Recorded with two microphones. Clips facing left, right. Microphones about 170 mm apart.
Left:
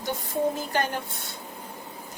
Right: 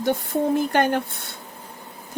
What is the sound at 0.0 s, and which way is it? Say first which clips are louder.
Speech: right 5 dB; 60° right (ahead or behind).